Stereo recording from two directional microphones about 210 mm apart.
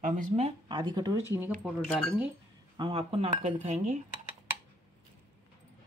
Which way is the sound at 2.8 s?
25° right (ahead or behind).